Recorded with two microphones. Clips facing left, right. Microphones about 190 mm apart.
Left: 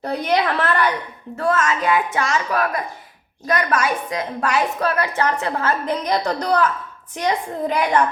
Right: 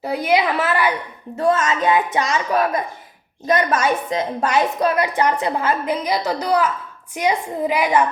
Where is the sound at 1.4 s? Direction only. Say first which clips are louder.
Right 2 dB; 20° right (ahead or behind).